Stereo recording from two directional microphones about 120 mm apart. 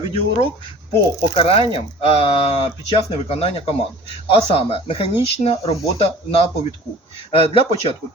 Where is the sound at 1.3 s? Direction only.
50° left (ahead or behind).